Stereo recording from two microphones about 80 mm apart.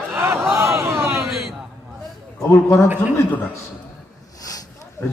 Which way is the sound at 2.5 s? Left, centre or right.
Left.